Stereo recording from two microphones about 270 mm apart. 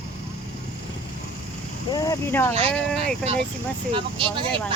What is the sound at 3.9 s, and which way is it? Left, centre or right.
Speech, centre.